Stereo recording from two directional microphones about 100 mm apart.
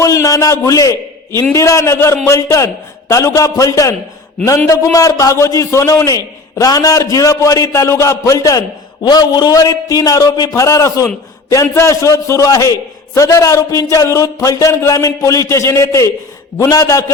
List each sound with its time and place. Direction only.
0.0 s a man's voice: 35° left (ahead or behind)